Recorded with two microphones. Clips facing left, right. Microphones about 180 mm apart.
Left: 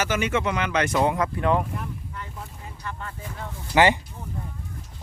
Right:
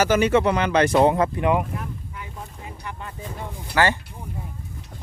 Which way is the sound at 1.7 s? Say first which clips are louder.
Right 1 dB; 5° right (ahead or behind).